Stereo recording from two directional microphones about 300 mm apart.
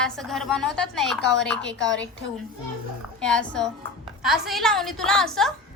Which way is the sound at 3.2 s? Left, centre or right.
Centre.